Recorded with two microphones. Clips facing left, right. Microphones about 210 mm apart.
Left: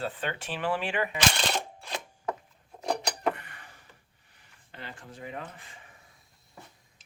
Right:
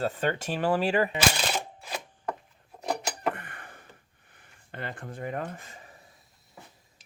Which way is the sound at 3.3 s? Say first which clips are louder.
Right 5 dB; 50° right (ahead or behind).